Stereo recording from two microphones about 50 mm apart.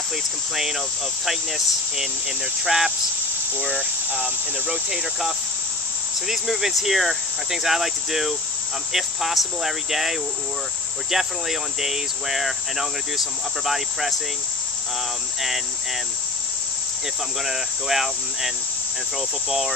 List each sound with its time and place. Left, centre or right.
0.6 s speech: centre
2.6 s speech: centre
3.5 s cricket: right
4.6 s cricket: centre
6.2 s speech: centre
17.5 s speech: centre